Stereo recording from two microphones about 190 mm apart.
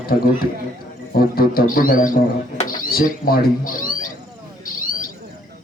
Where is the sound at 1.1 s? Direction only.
50° left (ahead or behind).